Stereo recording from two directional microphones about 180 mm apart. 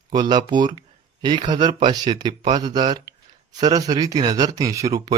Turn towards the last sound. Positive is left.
turn(degrees=-20)  # may be behind; listen again after turning